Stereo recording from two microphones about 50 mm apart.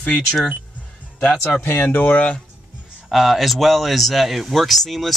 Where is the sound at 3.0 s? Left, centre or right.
Centre.